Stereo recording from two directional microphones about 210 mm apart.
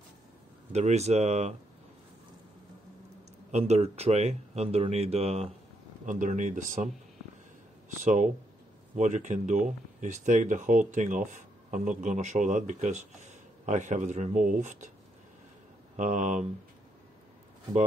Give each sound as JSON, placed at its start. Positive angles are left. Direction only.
{"t": 0.7, "sound": "speech", "side_deg": -30}
{"t": 3.5, "sound": "speech", "side_deg": -30}
{"t": 7.9, "sound": "speech", "side_deg": -35}
{"t": 16.0, "sound": "speech", "side_deg": -35}